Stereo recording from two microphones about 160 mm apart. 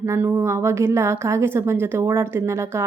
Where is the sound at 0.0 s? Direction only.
15° right (ahead or behind).